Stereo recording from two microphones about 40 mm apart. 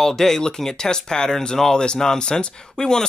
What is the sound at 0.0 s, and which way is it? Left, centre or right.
Speech, centre.